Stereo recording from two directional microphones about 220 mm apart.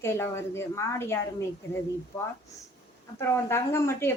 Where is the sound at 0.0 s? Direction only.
10° left (ahead or behind).